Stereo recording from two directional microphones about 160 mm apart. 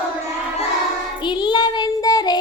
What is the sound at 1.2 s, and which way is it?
Child singing, 30° left (ahead or behind).